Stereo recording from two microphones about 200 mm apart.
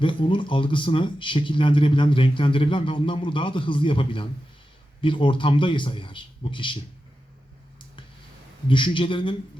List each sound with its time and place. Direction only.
0.0 s speech: 25° left (ahead or behind)
8.6 s speech: 25° left (ahead or behind)